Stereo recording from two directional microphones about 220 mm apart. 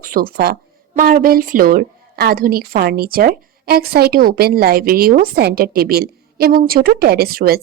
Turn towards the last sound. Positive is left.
turn(degrees=-45)  # may be behind; listen again after turning